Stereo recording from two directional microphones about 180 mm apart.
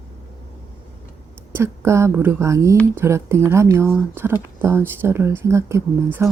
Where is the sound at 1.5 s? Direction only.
15° right (ahead or behind).